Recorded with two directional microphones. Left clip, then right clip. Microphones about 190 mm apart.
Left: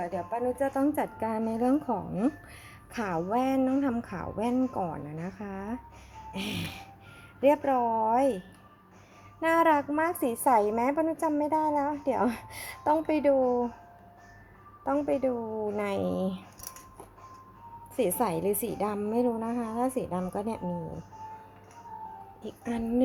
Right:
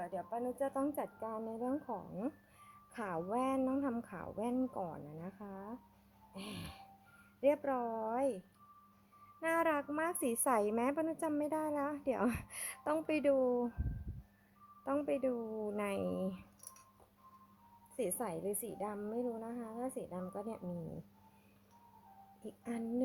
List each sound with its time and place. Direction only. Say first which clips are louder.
0.0 s a woman's voice: left 10 dB; 25° right (ahead or behind)
0.7 s a woman's voice: left 10 dB; 10° right (ahead or behind)
7.4 s speech: left 10 dB; 15° right (ahead or behind)
9.4 s a woman's voice: left 11 dB; 15° right (ahead or behind)
14.8 s speech: left 8 dB; 20° right (ahead or behind)
17.9 s a woman's voice: left 12 dB; 5° right (ahead or behind)
22.4 s speech: left 9 dB; 10° right (ahead or behind)